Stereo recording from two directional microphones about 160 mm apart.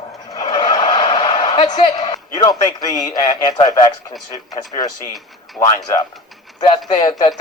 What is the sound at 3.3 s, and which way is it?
Speech, 35° left (ahead or behind).